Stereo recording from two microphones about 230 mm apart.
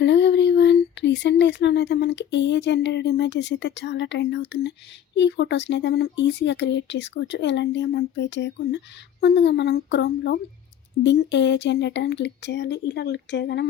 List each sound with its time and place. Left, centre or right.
0.0 s speech: left